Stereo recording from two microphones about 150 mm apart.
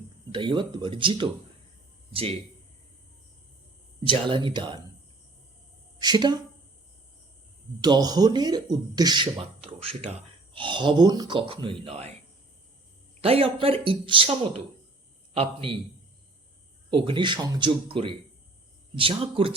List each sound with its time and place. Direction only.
0.3 s speech: 35° right (ahead or behind)
4.0 s speech: 35° right (ahead or behind)
6.0 s a woman's voice: 30° right (ahead or behind)
7.8 s speech: 30° right (ahead or behind)
13.2 s speech: 40° right (ahead or behind)
16.9 s speech: 35° right (ahead or behind)